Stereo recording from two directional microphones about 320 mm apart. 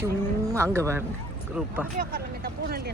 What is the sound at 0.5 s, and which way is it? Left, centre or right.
Speech, centre.